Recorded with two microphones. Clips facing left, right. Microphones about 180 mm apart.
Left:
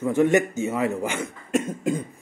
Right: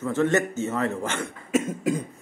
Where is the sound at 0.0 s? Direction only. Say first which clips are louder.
Left 3 dB; 15° left (ahead or behind).